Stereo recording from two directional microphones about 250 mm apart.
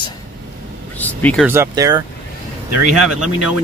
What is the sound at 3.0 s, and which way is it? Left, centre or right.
Speech, right.